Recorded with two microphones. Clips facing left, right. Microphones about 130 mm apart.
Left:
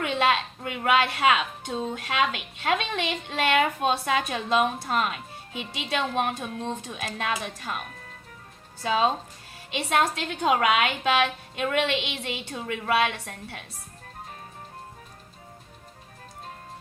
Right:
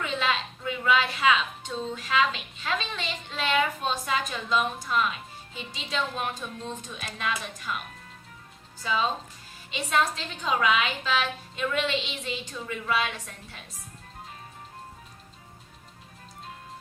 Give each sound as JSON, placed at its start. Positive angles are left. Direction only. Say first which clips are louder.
{"t": 0.0, "sound": "a woman's voice", "louder": "left 5 dB", "side_deg": 60}
{"t": 8.8, "sound": "a woman's voice", "louder": "left 4 dB", "side_deg": 55}